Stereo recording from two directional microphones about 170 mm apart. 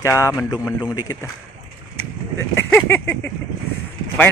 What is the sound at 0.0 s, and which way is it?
Speech, 15° left (ahead or behind).